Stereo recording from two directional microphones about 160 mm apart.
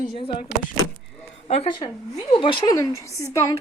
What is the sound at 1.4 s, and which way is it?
A woman's voice, 40° left (ahead or behind).